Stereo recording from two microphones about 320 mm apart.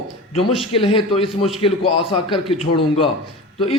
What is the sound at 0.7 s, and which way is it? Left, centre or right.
A man's voice, centre.